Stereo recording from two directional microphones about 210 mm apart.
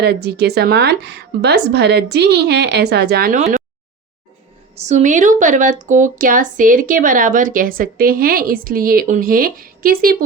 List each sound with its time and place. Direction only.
0.0 s a woman's voice: 50° right (ahead or behind)
4.9 s speech: 35° right (ahead or behind)